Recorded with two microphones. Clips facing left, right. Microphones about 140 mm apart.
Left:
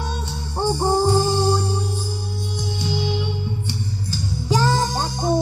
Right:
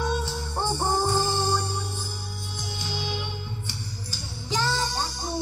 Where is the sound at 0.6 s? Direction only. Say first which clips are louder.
Left 7 dB; 15° left (ahead or behind).